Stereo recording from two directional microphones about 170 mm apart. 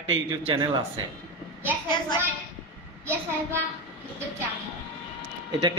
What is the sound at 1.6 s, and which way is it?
Speech, 10° right (ahead or behind).